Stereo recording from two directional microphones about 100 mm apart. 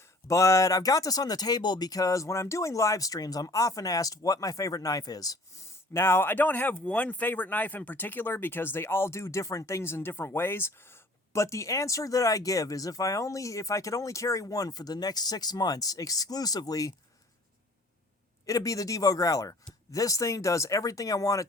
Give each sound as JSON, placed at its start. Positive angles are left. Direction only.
{"t": 0.0, "sound": "speech", "side_deg": 30}
{"t": 5.9, "sound": "speech", "side_deg": 25}
{"t": 18.4, "sound": "speech", "side_deg": 35}